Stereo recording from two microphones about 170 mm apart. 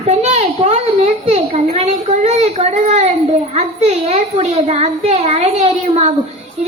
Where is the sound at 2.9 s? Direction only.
40° right (ahead or behind).